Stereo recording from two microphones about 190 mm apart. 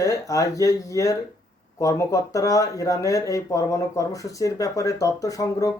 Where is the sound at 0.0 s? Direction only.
15° left (ahead or behind).